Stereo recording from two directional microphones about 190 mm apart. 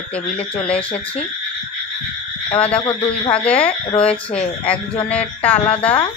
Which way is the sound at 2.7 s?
25° left (ahead or behind).